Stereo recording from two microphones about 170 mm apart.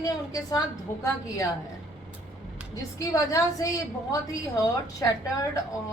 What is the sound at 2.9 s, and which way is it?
A woman's voice, 20° left (ahead or behind).